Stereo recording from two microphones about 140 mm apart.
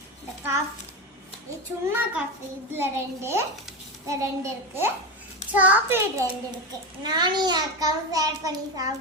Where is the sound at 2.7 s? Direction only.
15° right (ahead or behind).